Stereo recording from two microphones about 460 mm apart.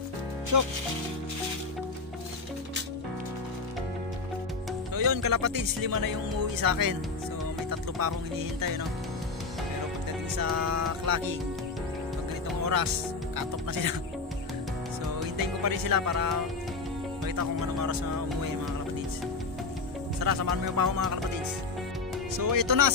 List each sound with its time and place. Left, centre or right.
0.5 s music: right
4.9 s speech: right
8.0 s speech: right
10.3 s speech: right
12.6 s speech: right
15.3 s speech: right
20.2 s speech: right
22.4 s speech: right